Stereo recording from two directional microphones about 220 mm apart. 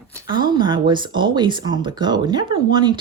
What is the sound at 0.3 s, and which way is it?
Speech, 20° right (ahead or behind).